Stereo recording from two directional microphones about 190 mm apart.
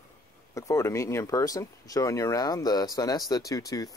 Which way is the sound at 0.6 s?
15° left (ahead or behind).